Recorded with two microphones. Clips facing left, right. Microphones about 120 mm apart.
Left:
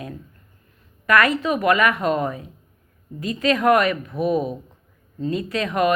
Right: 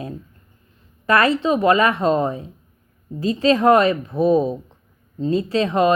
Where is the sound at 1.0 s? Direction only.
30° right (ahead or behind).